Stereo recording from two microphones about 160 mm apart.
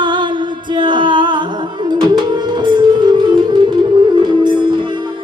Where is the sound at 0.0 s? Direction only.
30° right (ahead or behind).